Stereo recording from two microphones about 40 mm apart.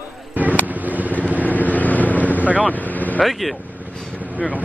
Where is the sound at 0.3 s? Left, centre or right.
Right.